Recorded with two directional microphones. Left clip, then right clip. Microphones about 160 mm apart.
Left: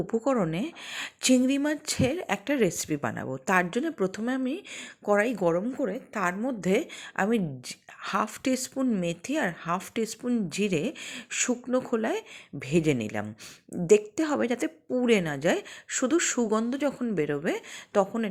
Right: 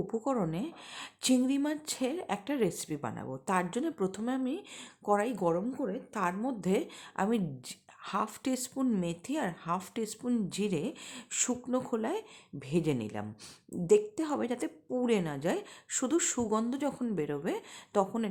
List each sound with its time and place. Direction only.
0.1 s a woman's voice: 20° left (ahead or behind)